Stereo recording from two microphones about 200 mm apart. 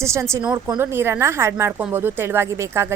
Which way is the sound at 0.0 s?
15° right (ahead or behind).